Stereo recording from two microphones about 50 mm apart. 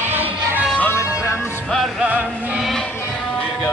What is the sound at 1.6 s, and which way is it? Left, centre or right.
Music, centre.